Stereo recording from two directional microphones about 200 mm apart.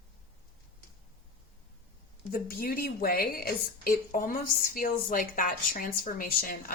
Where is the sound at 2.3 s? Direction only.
50° left (ahead or behind).